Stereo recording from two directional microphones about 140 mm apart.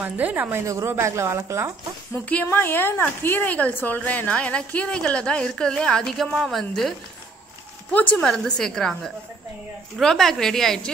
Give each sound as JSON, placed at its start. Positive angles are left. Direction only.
{"t": 0.0, "sound": "a woman's voice", "side_deg": -10}
{"t": 2.2, "sound": "a woman's voice", "side_deg": 15}